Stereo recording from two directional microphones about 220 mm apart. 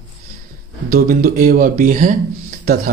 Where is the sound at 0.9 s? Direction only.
40° right (ahead or behind).